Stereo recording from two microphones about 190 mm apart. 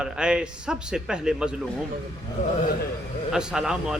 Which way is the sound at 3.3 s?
5° right (ahead or behind).